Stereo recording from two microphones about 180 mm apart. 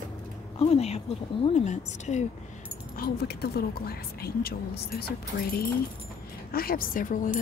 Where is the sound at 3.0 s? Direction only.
60° left (ahead or behind).